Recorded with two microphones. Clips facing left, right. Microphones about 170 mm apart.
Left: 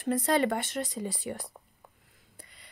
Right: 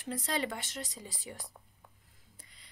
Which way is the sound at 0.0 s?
55° left (ahead or behind).